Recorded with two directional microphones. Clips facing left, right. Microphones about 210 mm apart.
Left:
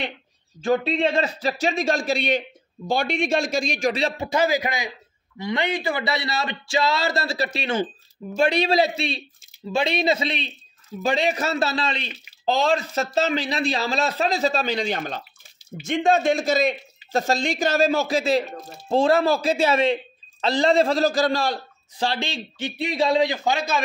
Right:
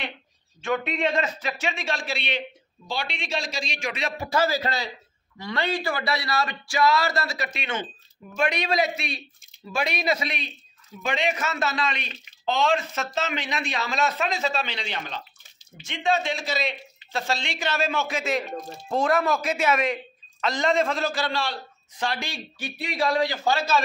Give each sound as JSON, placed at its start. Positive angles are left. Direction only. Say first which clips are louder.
{"t": 0.6, "sound": "speech", "louder": "left 5 dB", "side_deg": 35}
{"t": 4.3, "sound": "a man's voice", "louder": "left 1 dB", "side_deg": 15}